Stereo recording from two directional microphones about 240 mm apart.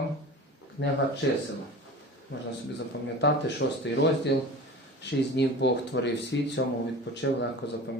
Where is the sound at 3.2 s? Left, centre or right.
Left.